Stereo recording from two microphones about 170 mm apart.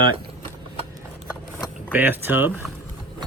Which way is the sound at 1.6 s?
10° right (ahead or behind).